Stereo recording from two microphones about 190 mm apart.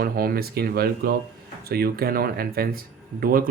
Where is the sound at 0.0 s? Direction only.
50° right (ahead or behind).